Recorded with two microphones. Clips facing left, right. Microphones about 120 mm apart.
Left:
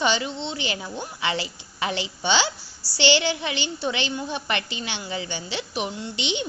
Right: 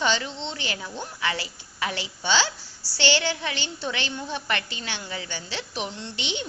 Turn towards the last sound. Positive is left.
turn(degrees=20)  # may be behind; listen again after turning